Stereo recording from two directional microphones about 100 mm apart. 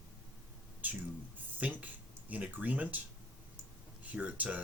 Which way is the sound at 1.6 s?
15° right (ahead or behind).